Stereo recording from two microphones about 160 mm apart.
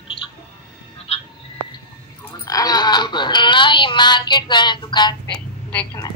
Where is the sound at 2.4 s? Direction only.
25° left (ahead or behind).